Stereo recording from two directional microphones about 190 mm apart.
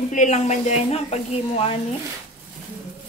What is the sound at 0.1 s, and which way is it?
A woman's voice, 40° left (ahead or behind).